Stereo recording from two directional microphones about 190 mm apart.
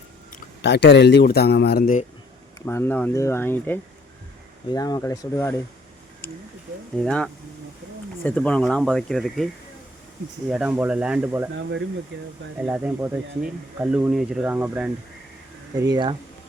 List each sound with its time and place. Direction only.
0.6 s speech: 65° left (ahead or behind); by 2.0 s 45° left (ahead or behind)
2.6 s speech: 15° left (ahead or behind)
10.5 s speech: 5° right (ahead or behind)
12.5 s speech: 5° right (ahead or behind)
15.8 s speech: 20° right (ahead or behind)